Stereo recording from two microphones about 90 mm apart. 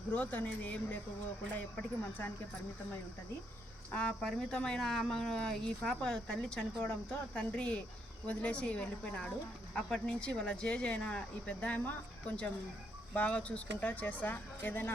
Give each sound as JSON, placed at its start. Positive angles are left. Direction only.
{"t": 0.1, "sound": "speech", "side_deg": 15}
{"t": 3.9, "sound": "speech", "side_deg": 10}